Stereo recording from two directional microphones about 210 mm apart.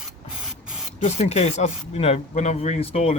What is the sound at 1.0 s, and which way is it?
Speech, 30° left (ahead or behind).